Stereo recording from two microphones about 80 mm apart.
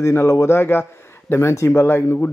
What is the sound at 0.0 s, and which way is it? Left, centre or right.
A man's voice, left.